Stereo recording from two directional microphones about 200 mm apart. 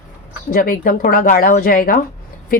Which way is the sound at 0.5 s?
45° left (ahead or behind).